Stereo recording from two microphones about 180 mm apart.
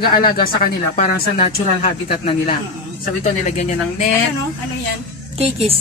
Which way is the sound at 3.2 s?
40° left (ahead or behind).